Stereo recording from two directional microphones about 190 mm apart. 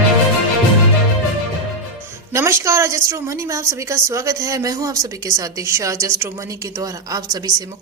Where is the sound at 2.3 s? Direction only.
15° right (ahead or behind).